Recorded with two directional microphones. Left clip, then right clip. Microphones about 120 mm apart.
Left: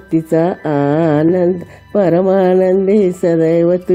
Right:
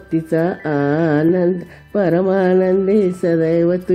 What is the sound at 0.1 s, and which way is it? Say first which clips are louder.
Speech: left 4 dB; 30° left (ahead or behind).